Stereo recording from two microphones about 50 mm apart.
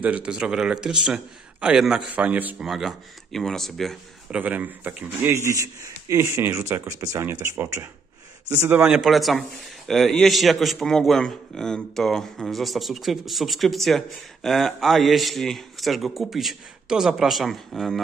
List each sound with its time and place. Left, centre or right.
0.0 s speech: right
0.3 s a man's voice: centre
2.0 s speech: right
2.6 s a man's voice: centre
3.3 s a man's voice: centre
4.4 s speech: right
5.3 s speech: right
6.1 s speech: right
6.5 s speech: right
7.5 s speech: right
8.5 s speech: right
8.8 s a man's voice: centre